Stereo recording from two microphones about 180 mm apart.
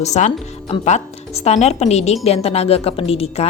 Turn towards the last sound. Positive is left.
turn(degrees=35)  # may be behind; listen again after turning